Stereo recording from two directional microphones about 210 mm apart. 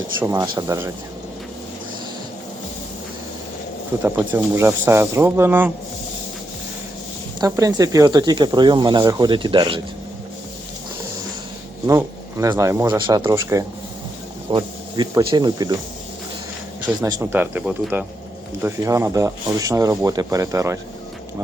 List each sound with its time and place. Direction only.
0.2 s speech: 20° right (ahead or behind)
4.0 s speech: 10° right (ahead or behind)
7.4 s speech: 15° right (ahead or behind)
11.9 s speech: 15° right (ahead or behind)
16.8 s speech: 15° right (ahead or behind)